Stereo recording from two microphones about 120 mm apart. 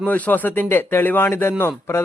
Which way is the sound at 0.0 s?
15° left (ahead or behind).